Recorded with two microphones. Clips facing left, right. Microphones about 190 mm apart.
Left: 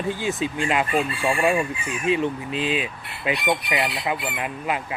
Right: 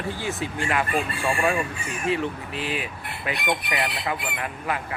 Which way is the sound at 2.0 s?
20° left (ahead or behind).